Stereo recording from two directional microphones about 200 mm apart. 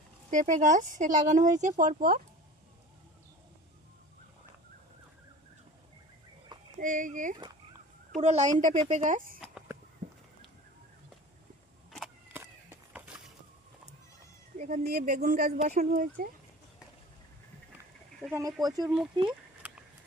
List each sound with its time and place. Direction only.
0.3 s speech: 40° right (ahead or behind)
6.7 s speech: 40° right (ahead or behind)
9.4 s a sound: 5° right (ahead or behind)
14.6 s speech: 45° right (ahead or behind)
18.2 s speech: 5° right (ahead or behind)
18.6 s speech: 20° right (ahead or behind)